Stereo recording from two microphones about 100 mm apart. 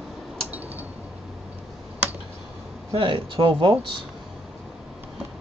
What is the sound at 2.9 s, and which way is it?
Speech, 60° right (ahead or behind).